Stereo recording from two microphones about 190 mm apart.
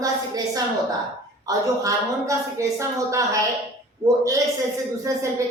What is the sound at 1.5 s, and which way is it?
A woman's voice, 15° right (ahead or behind).